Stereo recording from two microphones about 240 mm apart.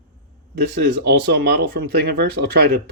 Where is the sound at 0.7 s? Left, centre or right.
Right.